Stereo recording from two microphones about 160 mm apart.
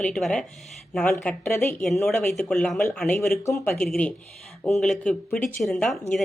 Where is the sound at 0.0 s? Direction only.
5° left (ahead or behind).